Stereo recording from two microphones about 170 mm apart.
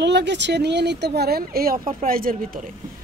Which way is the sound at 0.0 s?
90° right.